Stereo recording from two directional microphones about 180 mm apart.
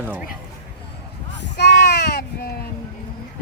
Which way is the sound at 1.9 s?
65° left (ahead or behind).